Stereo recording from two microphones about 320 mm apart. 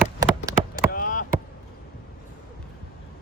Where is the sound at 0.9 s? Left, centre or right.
Left.